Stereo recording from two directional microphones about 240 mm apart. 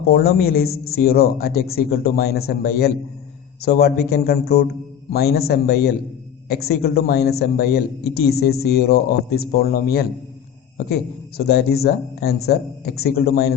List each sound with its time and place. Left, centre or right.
0.1 s speech: left